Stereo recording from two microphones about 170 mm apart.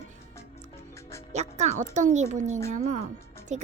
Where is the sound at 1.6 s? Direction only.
45° right (ahead or behind).